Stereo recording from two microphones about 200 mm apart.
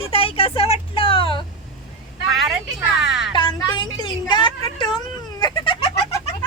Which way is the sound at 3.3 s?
20° left (ahead or behind).